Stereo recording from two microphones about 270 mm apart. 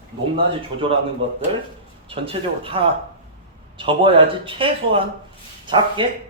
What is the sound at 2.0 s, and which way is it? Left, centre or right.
Speech, right.